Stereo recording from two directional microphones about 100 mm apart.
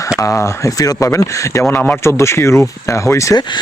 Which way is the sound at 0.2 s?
30° left (ahead or behind).